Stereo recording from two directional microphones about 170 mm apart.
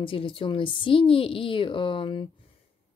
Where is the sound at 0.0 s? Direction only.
30° left (ahead or behind).